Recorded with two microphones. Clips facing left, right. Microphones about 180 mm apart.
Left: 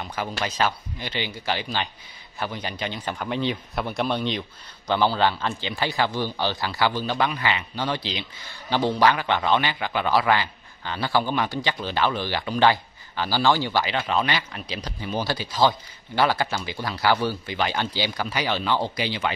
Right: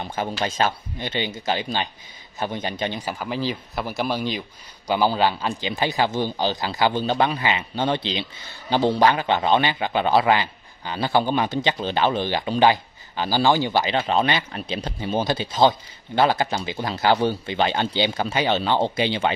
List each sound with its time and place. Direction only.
0.6 s a man's voice: 25° right (ahead or behind)
3.1 s a man's voice: 5° right (ahead or behind); by 19.3 s 25° right (ahead or behind)